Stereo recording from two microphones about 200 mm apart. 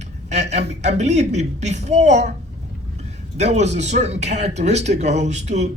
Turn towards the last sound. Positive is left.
turn(degrees=-35)  # may be behind; listen again after turning